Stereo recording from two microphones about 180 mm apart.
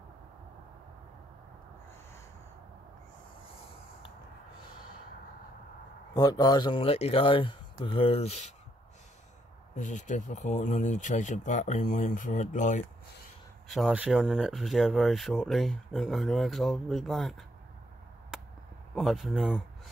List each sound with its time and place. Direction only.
6.1 s speech: 20° left (ahead or behind); by 8.5 s 40° left (ahead or behind)
9.8 s speech: 45° left (ahead or behind)
13.7 s speech: centre (ahead or behind)
18.9 s speech: centre (ahead or behind)